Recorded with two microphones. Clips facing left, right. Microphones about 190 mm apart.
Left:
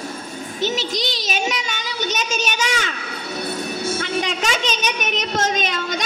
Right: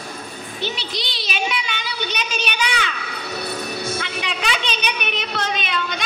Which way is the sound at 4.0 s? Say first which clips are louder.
Left 4 dB; 45° left (ahead or behind).